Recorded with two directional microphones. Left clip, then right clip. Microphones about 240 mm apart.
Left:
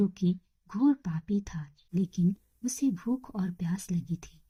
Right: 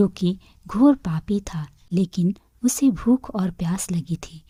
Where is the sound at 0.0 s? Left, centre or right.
Right.